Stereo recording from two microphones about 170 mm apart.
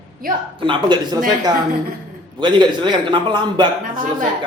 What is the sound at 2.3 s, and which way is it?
A man's voice, 25° right (ahead or behind).